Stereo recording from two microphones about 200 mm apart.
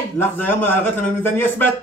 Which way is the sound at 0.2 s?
10° left (ahead or behind).